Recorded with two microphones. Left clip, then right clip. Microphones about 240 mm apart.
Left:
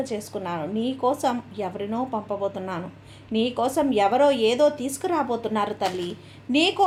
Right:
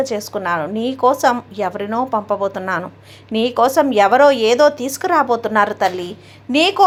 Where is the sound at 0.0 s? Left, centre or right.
Centre.